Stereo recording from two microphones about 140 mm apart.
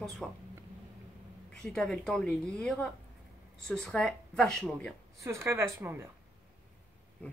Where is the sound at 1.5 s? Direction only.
5° left (ahead or behind).